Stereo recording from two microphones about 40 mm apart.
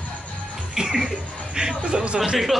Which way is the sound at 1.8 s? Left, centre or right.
Right.